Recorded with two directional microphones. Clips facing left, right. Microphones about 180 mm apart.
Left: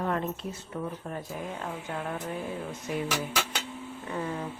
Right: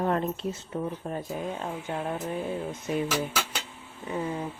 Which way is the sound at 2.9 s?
25° right (ahead or behind).